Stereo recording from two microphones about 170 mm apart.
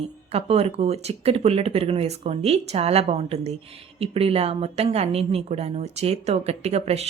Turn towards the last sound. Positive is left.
turn(degrees=-40)  # may be behind; listen again after turning